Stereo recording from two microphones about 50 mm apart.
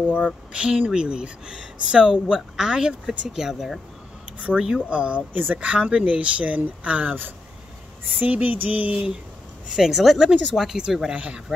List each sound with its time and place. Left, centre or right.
0.5 s speech: right; by 3.8 s centre
4.6 s speech: centre
5.3 s a sound: right
5.7 s speech: right
8.2 s a sound: right
9.7 s speech: centre
11.1 s speech: right